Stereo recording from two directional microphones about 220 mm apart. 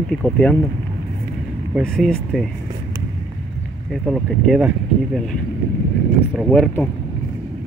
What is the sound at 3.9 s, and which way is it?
Speech, centre (ahead or behind).